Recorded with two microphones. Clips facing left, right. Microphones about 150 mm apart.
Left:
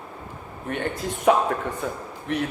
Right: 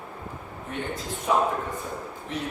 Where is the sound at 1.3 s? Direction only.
80° left.